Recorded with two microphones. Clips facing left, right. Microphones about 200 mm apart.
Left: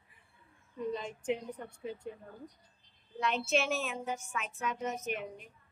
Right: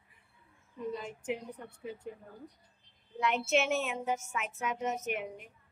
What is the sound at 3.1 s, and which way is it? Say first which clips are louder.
A child's voice: right 2 dB; 20° right (ahead or behind).